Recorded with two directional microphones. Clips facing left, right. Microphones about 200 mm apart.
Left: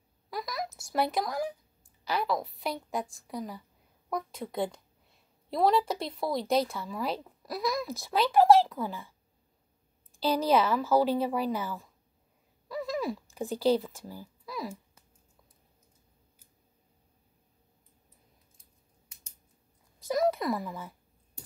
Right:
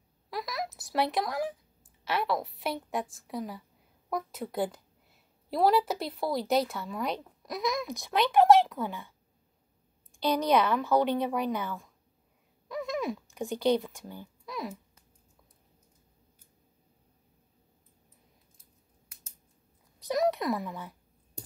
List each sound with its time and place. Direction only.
0.3 s a sound: centre (ahead or behind)
2.0 s a woman's voice: centre (ahead or behind)
10.2 s a woman's voice: 5° left (ahead or behind)
18.6 s scissors: 5° right (ahead or behind)
20.0 s speech: centre (ahead or behind)